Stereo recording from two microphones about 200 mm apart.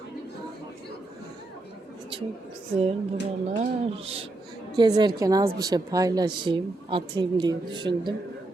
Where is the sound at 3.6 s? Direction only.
30° right (ahead or behind).